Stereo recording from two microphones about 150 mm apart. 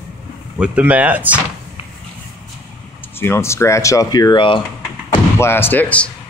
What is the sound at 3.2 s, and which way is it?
Speech, 15° left (ahead or behind).